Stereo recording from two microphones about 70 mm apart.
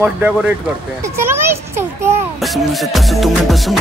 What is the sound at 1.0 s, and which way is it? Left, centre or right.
Children playing, right.